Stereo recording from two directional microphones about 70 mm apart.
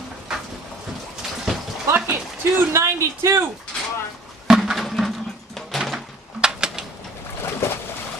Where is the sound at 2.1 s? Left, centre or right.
Right.